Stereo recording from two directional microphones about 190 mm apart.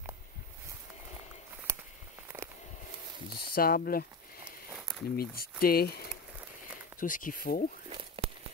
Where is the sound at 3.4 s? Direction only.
50° left (ahead or behind).